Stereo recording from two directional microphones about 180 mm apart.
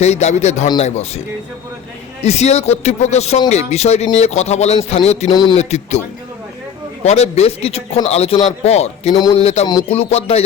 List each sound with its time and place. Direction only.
0.0 s speech: 40° left (ahead or behind)
2.2 s speech: 35° left (ahead or behind)
5.3 s speech: 25° left (ahead or behind)
5.5 s speech: 35° left (ahead or behind)
7.0 s speech: 35° left (ahead or behind)